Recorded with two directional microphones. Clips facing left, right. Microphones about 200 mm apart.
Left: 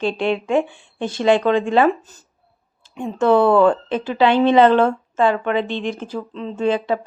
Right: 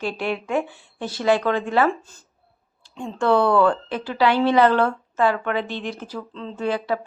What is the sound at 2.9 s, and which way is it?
Speech, 20° left (ahead or behind).